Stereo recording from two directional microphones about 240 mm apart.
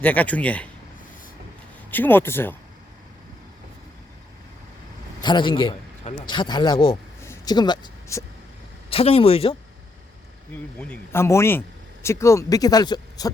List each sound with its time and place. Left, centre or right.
0.0 s speech: centre
1.9 s speech: centre
5.2 s a man's voice: centre
10.5 s speech: centre